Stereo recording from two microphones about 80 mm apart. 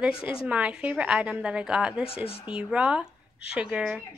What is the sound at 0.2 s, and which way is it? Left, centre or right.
A woman's voice, centre.